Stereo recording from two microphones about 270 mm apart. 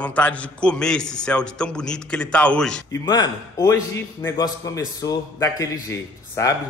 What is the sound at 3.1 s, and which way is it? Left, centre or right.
A man's voice, centre.